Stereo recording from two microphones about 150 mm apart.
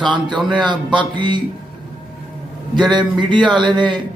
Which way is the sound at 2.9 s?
30° right (ahead or behind).